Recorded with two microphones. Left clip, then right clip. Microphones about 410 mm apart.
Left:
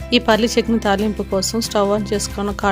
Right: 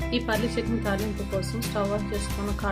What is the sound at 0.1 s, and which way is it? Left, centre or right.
Speech, left.